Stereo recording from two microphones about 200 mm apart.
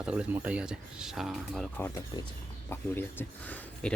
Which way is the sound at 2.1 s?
20° left (ahead or behind).